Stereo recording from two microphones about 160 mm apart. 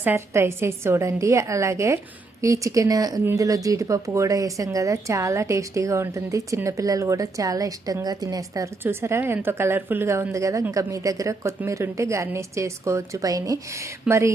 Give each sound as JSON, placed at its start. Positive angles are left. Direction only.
{"t": 0.0, "sound": "a woman's voice", "side_deg": -15}